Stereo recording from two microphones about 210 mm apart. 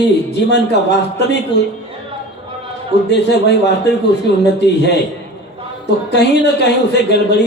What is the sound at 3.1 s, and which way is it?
A man's voice, 55° left (ahead or behind).